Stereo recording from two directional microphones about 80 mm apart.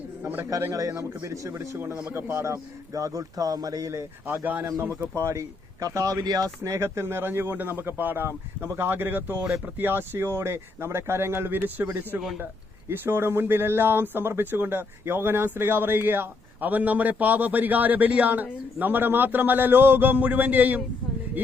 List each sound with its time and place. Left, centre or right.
0.2 s a man's voice: right
0.7 s a man's voice: right
4.3 s speech: right
4.8 s a man's voice: right
6.6 s speech: right